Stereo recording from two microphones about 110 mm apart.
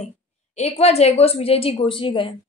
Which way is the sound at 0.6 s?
70° left (ahead or behind).